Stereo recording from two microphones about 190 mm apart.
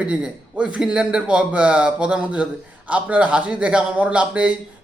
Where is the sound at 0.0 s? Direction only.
5° right (ahead or behind).